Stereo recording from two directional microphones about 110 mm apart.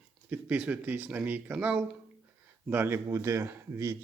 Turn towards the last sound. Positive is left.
turn(degrees=-30)  # may be behind; listen again after turning